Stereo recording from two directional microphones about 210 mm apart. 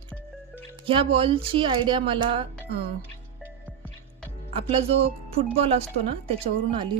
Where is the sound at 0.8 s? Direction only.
25° right (ahead or behind).